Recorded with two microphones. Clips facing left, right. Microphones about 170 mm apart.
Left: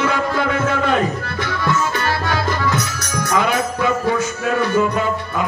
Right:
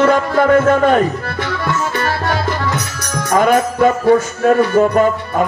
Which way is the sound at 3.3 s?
45° right (ahead or behind).